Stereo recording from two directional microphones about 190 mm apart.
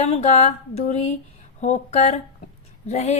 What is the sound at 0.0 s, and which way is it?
Speech, 35° left (ahead or behind).